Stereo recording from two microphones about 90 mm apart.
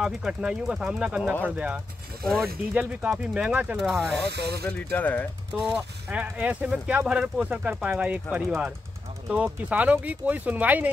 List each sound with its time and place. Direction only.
0.0 s speech: 10° right (ahead or behind)
3.7 s speech: centre (ahead or behind)
4.7 s speech: 15° left (ahead or behind)
5.8 s speech: 20° right (ahead or behind)